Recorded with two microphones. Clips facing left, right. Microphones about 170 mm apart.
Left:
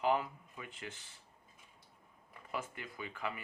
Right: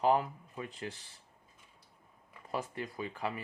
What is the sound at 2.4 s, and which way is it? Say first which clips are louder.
Speech: right 5 dB; 35° right (ahead or behind).